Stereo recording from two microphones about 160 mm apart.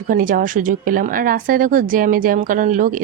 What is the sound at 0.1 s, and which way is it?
Speech, 60° right (ahead or behind).